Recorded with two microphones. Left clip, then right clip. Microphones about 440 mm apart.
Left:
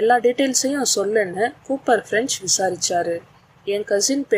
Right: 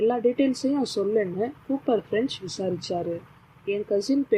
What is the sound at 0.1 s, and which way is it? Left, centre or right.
Speech, centre.